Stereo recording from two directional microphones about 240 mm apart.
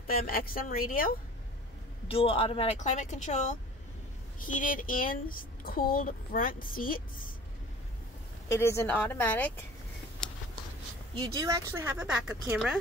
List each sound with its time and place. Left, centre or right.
0.0 s speech: left
2.0 s a woman's voice: left
8.5 s a woman's voice: centre
11.3 s speech: centre